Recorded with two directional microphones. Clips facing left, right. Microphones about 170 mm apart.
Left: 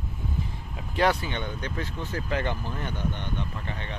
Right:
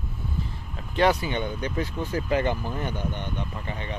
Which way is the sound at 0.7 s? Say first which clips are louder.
Right 2 dB; 5° left (ahead or behind).